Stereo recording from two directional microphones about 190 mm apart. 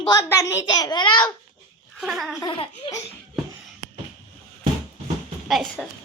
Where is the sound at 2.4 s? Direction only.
25° left (ahead or behind).